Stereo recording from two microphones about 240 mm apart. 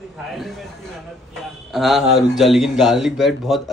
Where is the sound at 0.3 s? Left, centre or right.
Centre.